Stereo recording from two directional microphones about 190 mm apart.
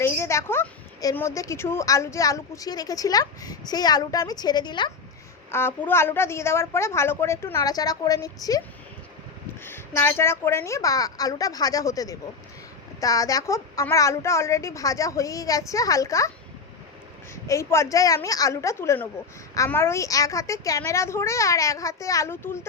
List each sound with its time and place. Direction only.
0.0 s a sound: 15° left (ahead or behind)
1.0 s a woman's voice: 15° left (ahead or behind)
5.5 s a woman's voice: 10° left (ahead or behind)
9.6 s a woman's voice: 10° left (ahead or behind)
17.4 s a woman's voice: 15° left (ahead or behind)